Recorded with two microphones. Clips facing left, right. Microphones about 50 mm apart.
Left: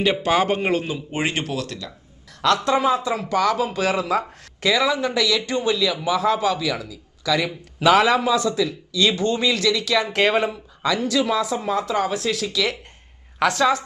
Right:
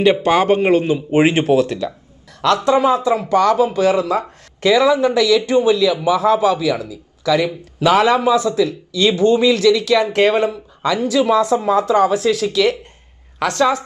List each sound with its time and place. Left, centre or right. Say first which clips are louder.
0.0 s speech: right 6 dB; centre
2.6 s speech: right 5 dB; centre